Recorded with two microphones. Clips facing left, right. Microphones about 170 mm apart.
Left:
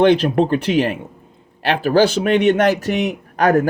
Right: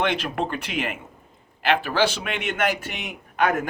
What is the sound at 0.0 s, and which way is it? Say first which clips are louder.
A man's voice: left 11 dB; 35° left (ahead or behind).